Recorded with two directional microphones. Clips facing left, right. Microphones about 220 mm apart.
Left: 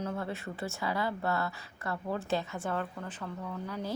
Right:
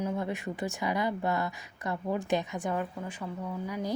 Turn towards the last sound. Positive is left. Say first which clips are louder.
# right 3 dB
turn(degrees=-10)  # may be behind; listen again after turning